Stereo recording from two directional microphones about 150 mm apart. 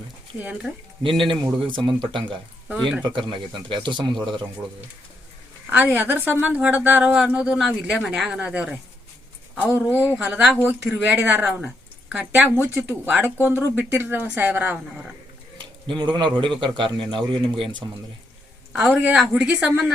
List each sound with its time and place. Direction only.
0.3 s a woman's voice: 10° right (ahead or behind)
1.0 s speech: 35° right (ahead or behind)
5.7 s a woman's voice: 10° right (ahead or behind)
15.5 s a man's voice: 30° right (ahead or behind)
18.7 s a woman's voice: 5° right (ahead or behind)